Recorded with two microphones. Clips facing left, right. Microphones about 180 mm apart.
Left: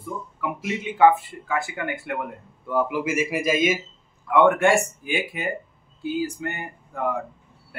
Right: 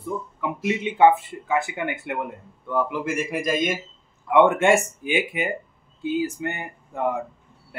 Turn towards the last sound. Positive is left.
turn(degrees=-20)  # may be behind; listen again after turning